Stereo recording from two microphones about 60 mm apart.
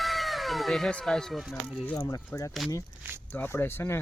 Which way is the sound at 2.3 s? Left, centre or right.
Left.